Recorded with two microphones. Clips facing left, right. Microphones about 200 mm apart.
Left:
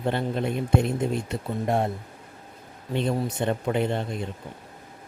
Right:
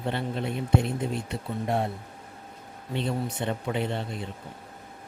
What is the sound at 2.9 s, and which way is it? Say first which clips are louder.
Speech: left 4 dB; 50° left (ahead or behind).